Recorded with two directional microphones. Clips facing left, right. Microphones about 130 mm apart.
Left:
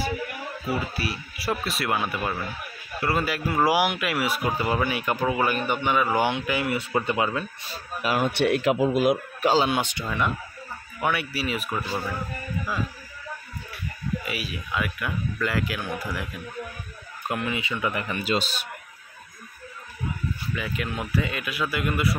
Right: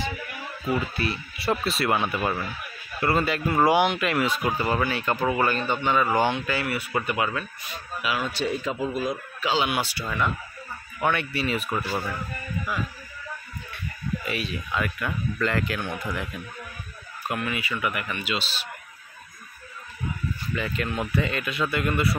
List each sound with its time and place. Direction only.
0.7 s speech: 5° left (ahead or behind); by 7.8 s 30° left (ahead or behind)
8.0 s speech: 45° left (ahead or behind)
8.3 s speech: 70° left (ahead or behind)
9.4 s speech: 40° left (ahead or behind)
9.7 s speech: 20° left (ahead or behind)
11.0 s speech: 5° left (ahead or behind)
14.2 s speech: 5° left (ahead or behind)
17.3 s speech: 20° left (ahead or behind); by 18.6 s 45° left (ahead or behind)
20.5 s speech: 5° left (ahead or behind)